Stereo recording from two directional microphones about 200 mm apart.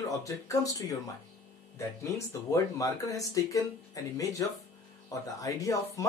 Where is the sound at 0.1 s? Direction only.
15° left (ahead or behind).